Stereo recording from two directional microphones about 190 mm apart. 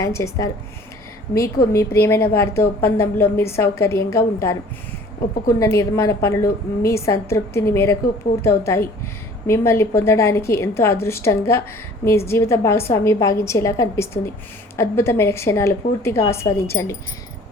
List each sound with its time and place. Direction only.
0.0 s a woman's voice: 15° left (ahead or behind)
5.5 s a woman's voice: 15° left (ahead or behind)